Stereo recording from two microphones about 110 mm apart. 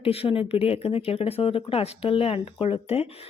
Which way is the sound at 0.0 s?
60° left (ahead or behind).